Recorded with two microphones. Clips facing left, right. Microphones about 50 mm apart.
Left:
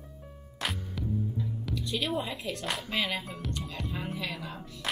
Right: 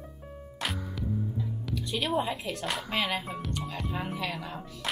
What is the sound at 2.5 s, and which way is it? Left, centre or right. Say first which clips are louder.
Speech: even; centre.